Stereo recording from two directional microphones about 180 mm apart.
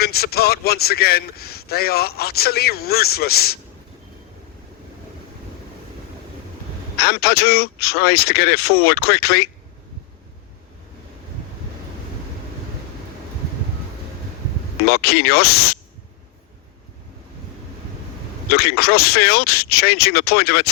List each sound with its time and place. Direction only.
0.0 s a man's voice: 60° left (ahead or behind)
6.9 s a man's voice: 60° left (ahead or behind)
14.8 s a man's voice: 60° left (ahead or behind)
18.5 s a man's voice: 60° left (ahead or behind)